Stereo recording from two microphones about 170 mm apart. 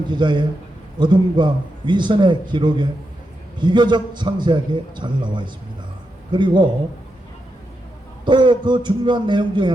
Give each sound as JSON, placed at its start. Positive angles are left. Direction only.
{"t": 0.1, "sound": "a man's voice", "side_deg": -25}
{"t": 8.2, "sound": "a man's voice", "side_deg": -25}